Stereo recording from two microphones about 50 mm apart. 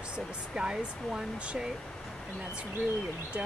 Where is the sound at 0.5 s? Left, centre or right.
Centre.